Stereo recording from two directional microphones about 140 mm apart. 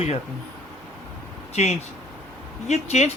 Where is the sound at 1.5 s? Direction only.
50° left (ahead or behind).